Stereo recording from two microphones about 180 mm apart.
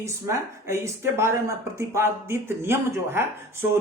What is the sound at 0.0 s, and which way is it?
Speech, 15° right (ahead or behind).